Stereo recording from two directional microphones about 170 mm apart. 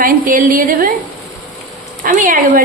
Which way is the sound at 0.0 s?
55° right (ahead or behind).